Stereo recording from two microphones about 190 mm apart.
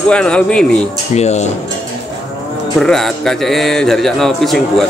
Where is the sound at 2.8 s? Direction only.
Centre (ahead or behind).